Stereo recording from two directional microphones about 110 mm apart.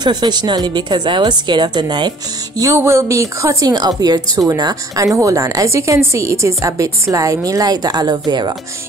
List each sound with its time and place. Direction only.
0.0 s a woman's voice: 40° right (ahead or behind)
2.7 s a woman's voice: 25° right (ahead or behind); by 8.5 s 40° right (ahead or behind)